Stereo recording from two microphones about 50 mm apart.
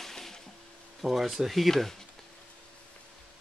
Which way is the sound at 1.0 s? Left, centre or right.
Centre.